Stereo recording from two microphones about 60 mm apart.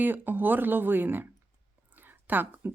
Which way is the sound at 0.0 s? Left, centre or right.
Right.